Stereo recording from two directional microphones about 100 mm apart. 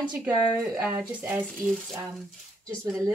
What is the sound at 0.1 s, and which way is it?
Speech, 10° right (ahead or behind).